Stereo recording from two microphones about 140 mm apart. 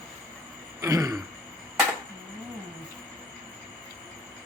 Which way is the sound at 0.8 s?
25° right (ahead or behind).